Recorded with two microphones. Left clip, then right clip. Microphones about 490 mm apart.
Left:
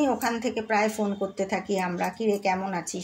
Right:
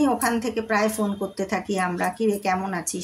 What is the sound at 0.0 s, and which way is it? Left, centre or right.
Speech, right.